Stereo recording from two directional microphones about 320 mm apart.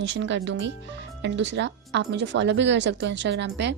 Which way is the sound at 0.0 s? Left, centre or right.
Right.